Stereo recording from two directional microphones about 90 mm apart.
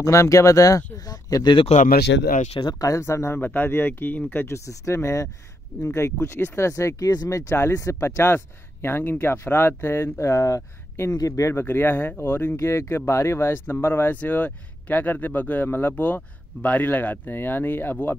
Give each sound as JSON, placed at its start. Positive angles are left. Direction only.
{"t": 0.0, "sound": "speech", "side_deg": 35}
{"t": 2.8, "sound": "speech", "side_deg": 35}
{"t": 3.3, "sound": "speech", "side_deg": 20}
{"t": 4.6, "sound": "speech", "side_deg": 35}